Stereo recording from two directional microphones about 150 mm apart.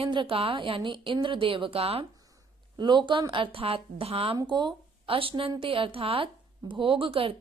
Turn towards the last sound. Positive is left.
turn(degrees=-35)  # may be behind; listen again after turning